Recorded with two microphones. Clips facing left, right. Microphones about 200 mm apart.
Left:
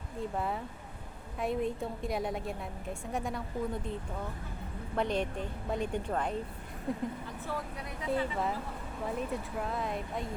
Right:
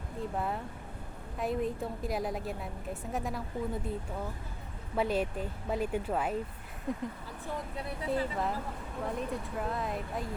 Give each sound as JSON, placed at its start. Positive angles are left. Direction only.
{"t": 0.2, "sound": "a woman's voice", "side_deg": 0}
{"t": 4.9, "sound": "a woman's voice", "side_deg": -5}
{"t": 7.9, "sound": "speech", "side_deg": -30}
{"t": 9.0, "sound": "a woman's voice", "side_deg": 0}